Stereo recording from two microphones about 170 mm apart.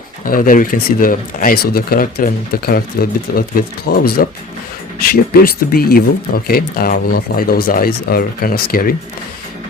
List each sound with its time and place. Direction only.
0.3 s speech: 55° left (ahead or behind)